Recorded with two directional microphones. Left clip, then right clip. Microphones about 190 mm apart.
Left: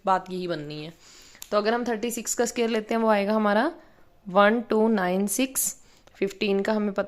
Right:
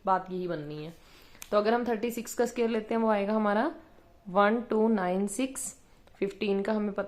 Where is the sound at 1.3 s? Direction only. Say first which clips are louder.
Left 2 dB; 30° left (ahead or behind).